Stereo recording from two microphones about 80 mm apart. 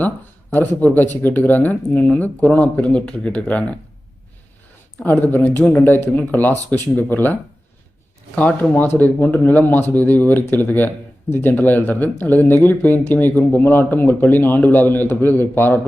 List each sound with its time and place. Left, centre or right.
0.5 s speech: left
5.0 s speech: left
8.4 s speech: centre